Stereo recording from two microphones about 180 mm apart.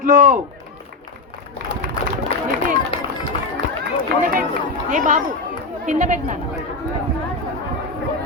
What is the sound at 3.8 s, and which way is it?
Run, 50° right (ahead or behind).